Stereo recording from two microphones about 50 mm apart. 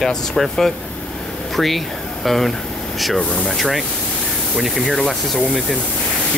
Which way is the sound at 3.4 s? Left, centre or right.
Centre.